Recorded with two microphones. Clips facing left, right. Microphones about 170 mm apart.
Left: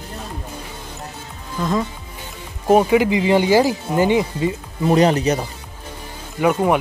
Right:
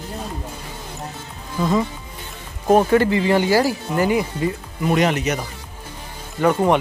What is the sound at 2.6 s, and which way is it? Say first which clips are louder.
Speech: left 1 dB; 10° left (ahead or behind).